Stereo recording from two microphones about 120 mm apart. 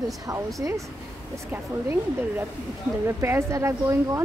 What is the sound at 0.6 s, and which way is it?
Speech, 25° right (ahead or behind).